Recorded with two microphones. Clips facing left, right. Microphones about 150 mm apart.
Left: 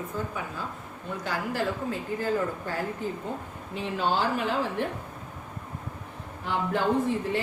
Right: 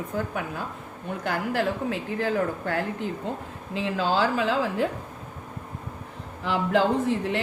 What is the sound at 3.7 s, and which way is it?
A woman's voice, 90° right.